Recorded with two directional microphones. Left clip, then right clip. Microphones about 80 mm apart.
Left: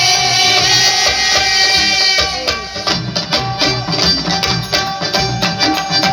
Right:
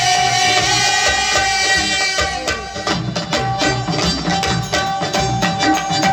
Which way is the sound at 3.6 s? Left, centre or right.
Right.